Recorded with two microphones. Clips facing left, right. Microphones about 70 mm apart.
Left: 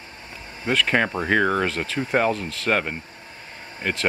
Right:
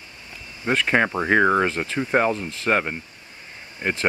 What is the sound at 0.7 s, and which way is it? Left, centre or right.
Speech, centre.